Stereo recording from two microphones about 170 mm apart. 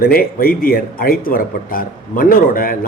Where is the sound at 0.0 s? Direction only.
60° left (ahead or behind).